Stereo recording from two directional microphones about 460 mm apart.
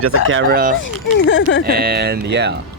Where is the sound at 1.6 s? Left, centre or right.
Centre.